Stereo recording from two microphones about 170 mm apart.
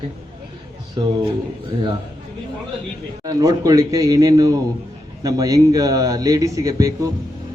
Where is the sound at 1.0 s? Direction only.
25° right (ahead or behind).